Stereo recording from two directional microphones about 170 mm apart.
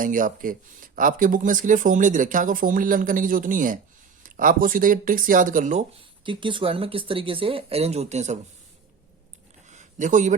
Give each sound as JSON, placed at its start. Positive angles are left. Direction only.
{"t": 0.0, "sound": "speech", "side_deg": -50}
{"t": 6.2, "sound": "speech", "side_deg": -30}
{"t": 9.6, "sound": "a sound", "side_deg": -45}